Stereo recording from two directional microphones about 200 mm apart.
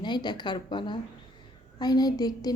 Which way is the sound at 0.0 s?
20° left (ahead or behind).